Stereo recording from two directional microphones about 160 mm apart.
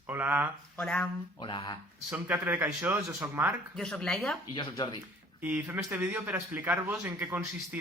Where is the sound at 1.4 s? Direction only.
30° left (ahead or behind).